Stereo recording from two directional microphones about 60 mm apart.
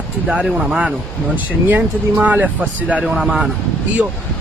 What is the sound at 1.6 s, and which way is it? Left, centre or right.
Speech, right.